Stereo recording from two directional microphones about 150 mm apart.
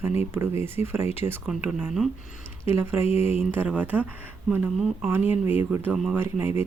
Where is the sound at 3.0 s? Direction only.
45° left (ahead or behind).